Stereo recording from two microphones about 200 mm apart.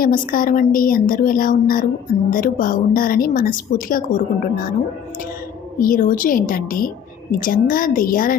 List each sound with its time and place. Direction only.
0.0 s a woman's voice: 45° left (ahead or behind)
5.8 s a woman's voice: 45° left (ahead or behind)